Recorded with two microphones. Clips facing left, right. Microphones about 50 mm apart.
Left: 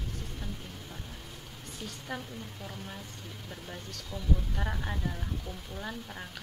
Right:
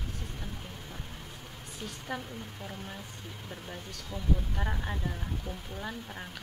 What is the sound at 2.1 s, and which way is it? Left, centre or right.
Speech, centre.